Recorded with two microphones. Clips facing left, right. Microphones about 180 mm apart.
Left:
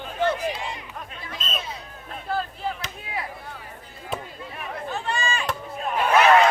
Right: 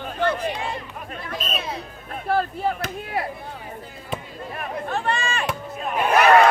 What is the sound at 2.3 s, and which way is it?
Chop, 55° right (ahead or behind).